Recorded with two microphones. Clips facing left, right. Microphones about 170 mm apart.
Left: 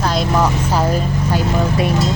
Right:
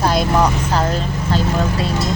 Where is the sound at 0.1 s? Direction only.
Centre (ahead or behind).